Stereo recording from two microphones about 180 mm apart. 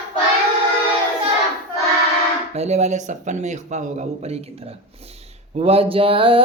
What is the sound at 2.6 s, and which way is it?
Speech, 40° right (ahead or behind).